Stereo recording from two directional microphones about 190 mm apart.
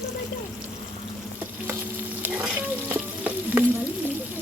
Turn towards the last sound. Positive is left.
turn(degrees=-10)  # may be behind; listen again after turning